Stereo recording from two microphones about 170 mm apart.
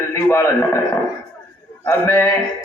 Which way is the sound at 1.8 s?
15° left (ahead or behind).